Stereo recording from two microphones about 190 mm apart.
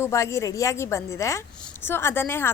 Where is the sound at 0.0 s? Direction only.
15° left (ahead or behind).